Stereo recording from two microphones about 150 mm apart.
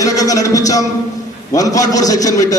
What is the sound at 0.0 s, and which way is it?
A man's voice, 25° left (ahead or behind).